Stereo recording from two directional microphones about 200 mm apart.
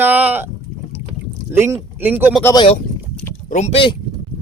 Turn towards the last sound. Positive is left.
turn(degrees=25)  # may be behind; listen again after turning